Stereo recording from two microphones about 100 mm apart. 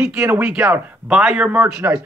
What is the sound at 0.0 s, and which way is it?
Speech, 10° right (ahead or behind).